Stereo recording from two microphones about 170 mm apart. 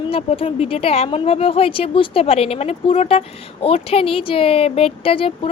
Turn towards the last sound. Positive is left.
turn(degrees=30)  # may be behind; listen again after turning